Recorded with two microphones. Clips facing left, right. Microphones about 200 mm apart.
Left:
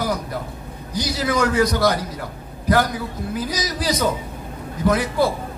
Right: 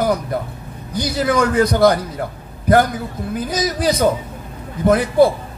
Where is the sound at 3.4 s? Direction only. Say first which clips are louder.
Right 6 dB; 55° right (ahead or behind).